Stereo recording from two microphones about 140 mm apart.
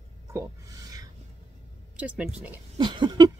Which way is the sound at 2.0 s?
10° right (ahead or behind).